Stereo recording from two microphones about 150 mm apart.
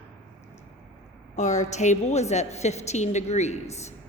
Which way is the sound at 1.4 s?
50° left (ahead or behind).